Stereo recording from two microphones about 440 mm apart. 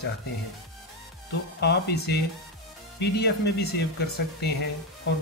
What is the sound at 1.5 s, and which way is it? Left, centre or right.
Speech, left.